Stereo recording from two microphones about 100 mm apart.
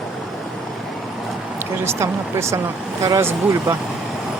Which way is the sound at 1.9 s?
30° right (ahead or behind).